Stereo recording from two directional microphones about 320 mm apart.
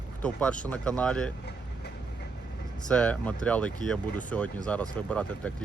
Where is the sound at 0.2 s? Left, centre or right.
Centre.